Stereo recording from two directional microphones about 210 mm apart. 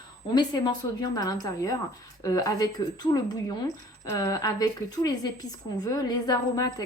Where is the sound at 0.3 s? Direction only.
20° left (ahead or behind).